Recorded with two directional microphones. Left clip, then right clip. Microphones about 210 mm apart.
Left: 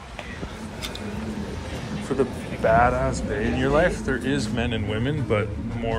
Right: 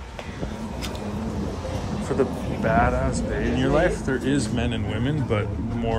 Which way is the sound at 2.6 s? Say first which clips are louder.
Left 3 dB; centre (ahead or behind).